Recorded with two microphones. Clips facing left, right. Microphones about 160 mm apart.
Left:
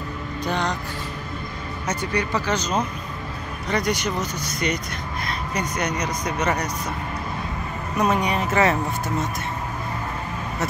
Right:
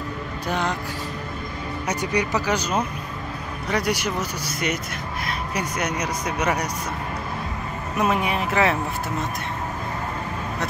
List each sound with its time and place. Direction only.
0.5 s speech: 5° right (ahead or behind)
1.9 s speech: 10° right (ahead or behind)
8.0 s speech: 5° right (ahead or behind)